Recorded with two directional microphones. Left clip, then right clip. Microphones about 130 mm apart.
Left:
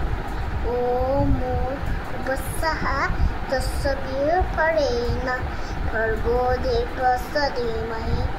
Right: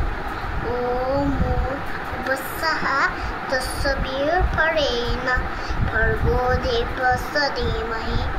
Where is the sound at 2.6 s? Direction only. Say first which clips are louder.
Right 4 dB; 5° right (ahead or behind).